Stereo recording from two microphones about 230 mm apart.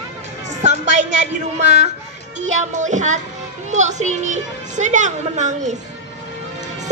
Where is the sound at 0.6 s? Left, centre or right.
Right.